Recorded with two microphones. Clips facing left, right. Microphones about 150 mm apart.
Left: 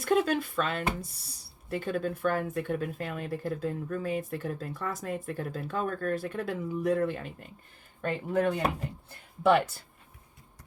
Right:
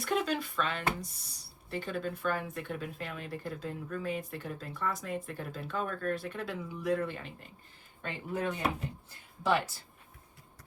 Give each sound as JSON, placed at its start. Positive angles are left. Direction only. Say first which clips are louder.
{"t": 0.0, "sound": "speech", "louder": "left 6 dB", "side_deg": 50}
{"t": 8.0, "sound": "speech", "louder": "left 7 dB", "side_deg": 60}
{"t": 9.0, "sound": "a sound", "louder": "left 7 dB", "side_deg": 60}